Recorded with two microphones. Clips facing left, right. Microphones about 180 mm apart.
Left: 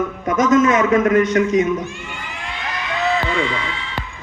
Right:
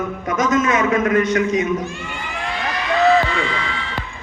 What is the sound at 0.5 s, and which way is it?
A man's voice, 45° left (ahead or behind).